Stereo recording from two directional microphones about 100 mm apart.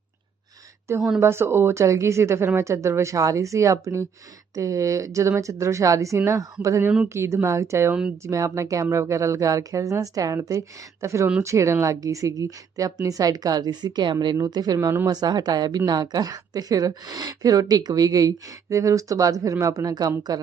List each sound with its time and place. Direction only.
0.9 s a woman's voice: 30° right (ahead or behind); by 14.3 s 50° right (ahead or behind)
14.3 s a woman's voice: 40° right (ahead or behind)